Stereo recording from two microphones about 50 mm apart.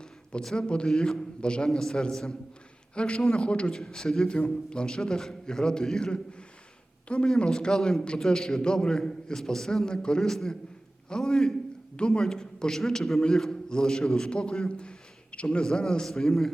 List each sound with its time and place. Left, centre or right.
0.4 s a man's voice: centre